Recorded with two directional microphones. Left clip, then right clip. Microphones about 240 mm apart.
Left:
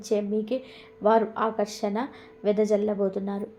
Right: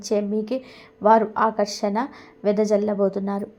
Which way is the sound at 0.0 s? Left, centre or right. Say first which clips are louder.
Right 3 dB; right.